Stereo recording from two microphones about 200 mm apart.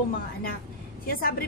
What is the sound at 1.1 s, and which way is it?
Speech, 45° left (ahead or behind).